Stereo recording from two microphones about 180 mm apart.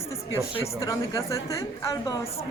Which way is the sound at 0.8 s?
15° left (ahead or behind).